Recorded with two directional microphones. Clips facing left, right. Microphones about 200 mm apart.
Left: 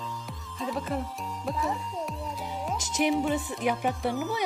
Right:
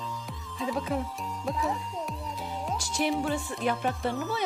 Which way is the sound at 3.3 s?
15° left (ahead or behind).